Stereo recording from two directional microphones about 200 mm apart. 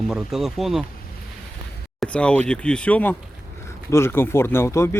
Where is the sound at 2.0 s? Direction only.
5° left (ahead or behind).